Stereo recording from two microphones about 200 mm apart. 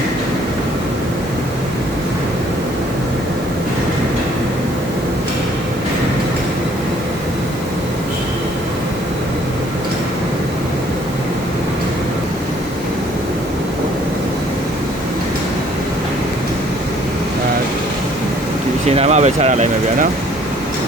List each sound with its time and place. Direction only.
18.9 s speech: 35° right (ahead or behind)